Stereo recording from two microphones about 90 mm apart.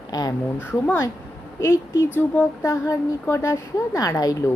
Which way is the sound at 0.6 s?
30° left (ahead or behind).